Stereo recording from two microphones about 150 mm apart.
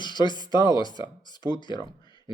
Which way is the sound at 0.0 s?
30° left (ahead or behind).